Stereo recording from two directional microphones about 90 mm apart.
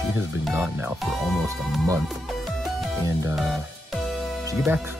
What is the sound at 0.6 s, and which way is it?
Speech, 25° right (ahead or behind).